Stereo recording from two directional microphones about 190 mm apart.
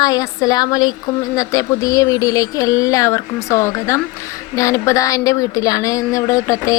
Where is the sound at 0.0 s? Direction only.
20° left (ahead or behind).